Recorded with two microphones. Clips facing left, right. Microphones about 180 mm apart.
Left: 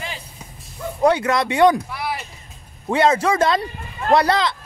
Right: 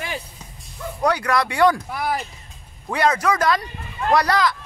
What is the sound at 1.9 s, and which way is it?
Speech, 45° right (ahead or behind).